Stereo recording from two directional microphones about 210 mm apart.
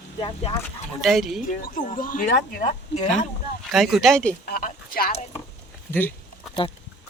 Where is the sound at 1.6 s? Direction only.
40° left (ahead or behind).